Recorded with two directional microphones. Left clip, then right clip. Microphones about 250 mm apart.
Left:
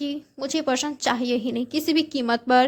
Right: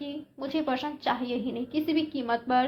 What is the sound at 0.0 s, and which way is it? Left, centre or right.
A woman's voice, left.